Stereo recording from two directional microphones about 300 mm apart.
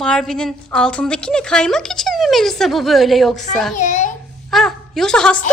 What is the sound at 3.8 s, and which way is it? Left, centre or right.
Speech, left.